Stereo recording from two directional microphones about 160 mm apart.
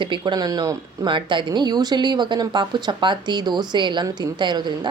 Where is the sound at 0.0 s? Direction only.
30° right (ahead or behind).